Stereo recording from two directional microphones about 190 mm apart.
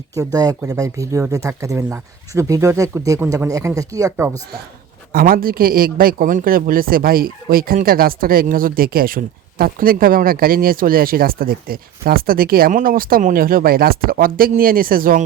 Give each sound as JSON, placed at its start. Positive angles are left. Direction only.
{"t": 0.3, "sound": "speech", "side_deg": -20}
{"t": 5.1, "sound": "a man's voice", "side_deg": -50}